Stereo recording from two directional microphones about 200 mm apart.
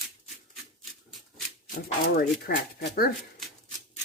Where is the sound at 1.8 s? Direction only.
50° left (ahead or behind).